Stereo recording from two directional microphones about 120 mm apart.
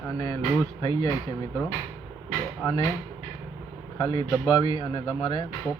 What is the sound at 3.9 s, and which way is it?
Speech, 30° left (ahead or behind).